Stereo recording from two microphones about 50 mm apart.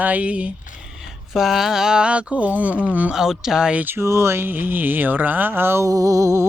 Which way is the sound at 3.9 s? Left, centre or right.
Right.